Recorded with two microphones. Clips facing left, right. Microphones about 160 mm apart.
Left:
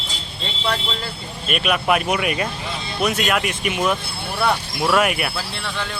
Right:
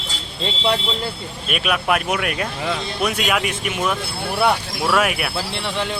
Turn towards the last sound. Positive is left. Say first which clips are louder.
# left 1 dB
turn(degrees=0)  # may be behind; listen again after turning